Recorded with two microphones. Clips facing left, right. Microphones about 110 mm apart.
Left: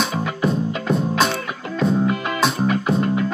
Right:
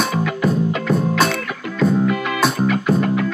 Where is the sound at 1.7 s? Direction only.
25° left (ahead or behind).